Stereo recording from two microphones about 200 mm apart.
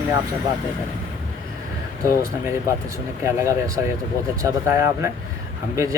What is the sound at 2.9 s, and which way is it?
Speech, 15° right (ahead or behind).